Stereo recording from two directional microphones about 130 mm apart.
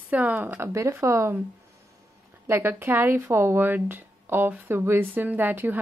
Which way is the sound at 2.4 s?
15° right (ahead or behind).